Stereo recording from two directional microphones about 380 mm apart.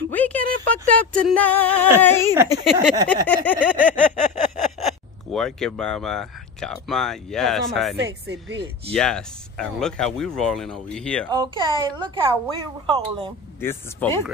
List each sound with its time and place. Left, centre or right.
0.1 s speech: centre
4.8 s speech: centre
8.3 s speech: right
8.9 s speech: centre
11.2 s speech: centre
13.6 s speech: centre